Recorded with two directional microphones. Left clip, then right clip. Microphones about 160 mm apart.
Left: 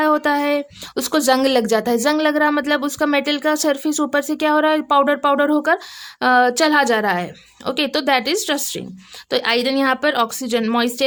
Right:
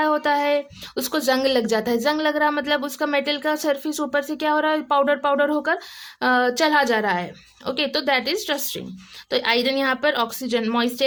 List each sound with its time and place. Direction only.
0.0 s a woman's voice: 25° left (ahead or behind)